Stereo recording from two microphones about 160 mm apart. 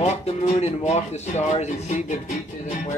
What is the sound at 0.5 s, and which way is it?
Music, 40° left (ahead or behind).